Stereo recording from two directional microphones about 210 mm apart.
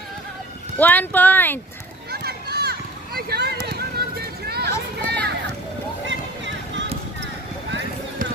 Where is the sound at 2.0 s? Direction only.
50° right (ahead or behind).